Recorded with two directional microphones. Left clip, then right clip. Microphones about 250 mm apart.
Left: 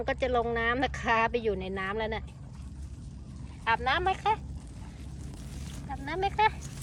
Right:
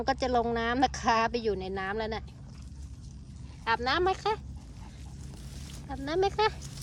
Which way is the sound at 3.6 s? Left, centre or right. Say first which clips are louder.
Even; centre.